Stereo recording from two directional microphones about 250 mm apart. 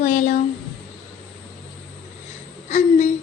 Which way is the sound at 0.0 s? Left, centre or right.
Left.